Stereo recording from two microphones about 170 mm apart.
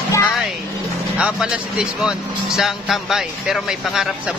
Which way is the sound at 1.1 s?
5° right (ahead or behind).